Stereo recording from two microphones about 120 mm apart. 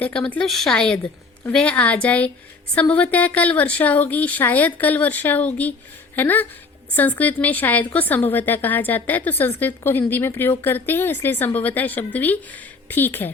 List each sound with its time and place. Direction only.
0.0 s speech: 10° left (ahead or behind)